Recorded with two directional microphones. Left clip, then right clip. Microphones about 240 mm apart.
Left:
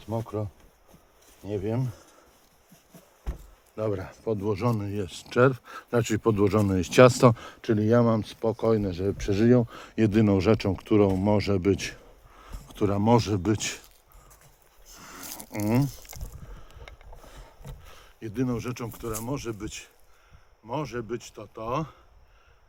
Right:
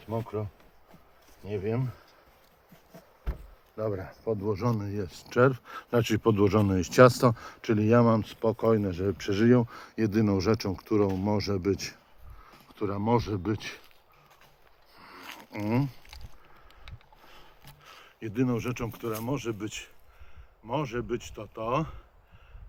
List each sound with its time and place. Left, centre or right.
0.0 s speech: left
1.5 s speech: left
3.8 s speech: left
12.4 s speech: left
14.9 s a sound: left
17.9 s speech: centre